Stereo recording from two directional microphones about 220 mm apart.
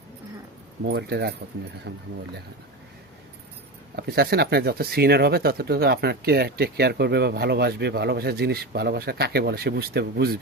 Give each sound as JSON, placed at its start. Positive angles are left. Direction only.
{"t": 0.9, "sound": "speech", "side_deg": -50}
{"t": 3.9, "sound": "speech", "side_deg": -45}